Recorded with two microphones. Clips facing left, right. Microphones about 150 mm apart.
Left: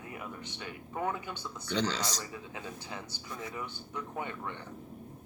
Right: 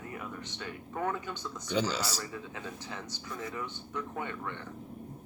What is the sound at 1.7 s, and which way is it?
Speech, 10° right (ahead or behind).